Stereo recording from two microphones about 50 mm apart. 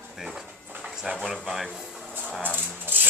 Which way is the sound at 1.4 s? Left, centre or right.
Centre.